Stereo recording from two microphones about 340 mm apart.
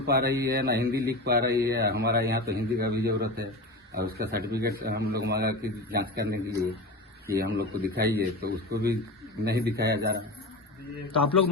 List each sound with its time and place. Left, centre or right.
0.0 s speech: right